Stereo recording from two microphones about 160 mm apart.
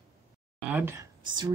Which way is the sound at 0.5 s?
10° right (ahead or behind).